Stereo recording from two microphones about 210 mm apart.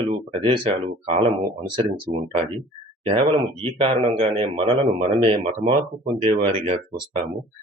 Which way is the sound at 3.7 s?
25° right (ahead or behind).